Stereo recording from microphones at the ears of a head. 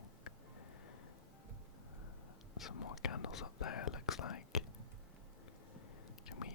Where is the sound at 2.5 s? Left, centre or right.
Left.